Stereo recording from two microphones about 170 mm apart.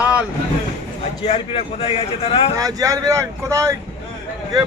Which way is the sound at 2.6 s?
20° right (ahead or behind).